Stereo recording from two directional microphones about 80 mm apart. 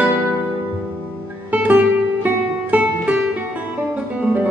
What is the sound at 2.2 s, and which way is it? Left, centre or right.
Music, centre.